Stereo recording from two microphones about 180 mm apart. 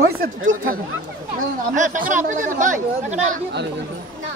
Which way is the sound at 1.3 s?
45° right (ahead or behind).